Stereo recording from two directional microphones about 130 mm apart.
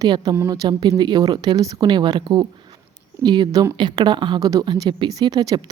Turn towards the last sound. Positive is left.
turn(degrees=-30)  # may be behind; listen again after turning